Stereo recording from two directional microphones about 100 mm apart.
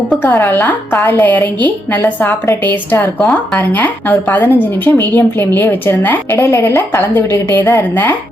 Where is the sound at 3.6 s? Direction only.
20° left (ahead or behind).